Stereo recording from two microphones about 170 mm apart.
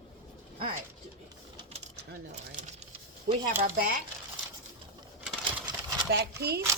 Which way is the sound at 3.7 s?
55° right (ahead or behind).